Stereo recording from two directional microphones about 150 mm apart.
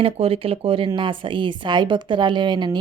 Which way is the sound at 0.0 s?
40° right (ahead or behind).